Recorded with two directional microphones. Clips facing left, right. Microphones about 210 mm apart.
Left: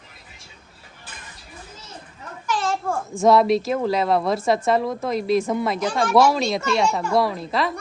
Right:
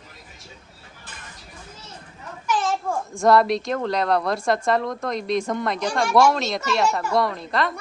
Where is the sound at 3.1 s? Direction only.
Centre (ahead or behind).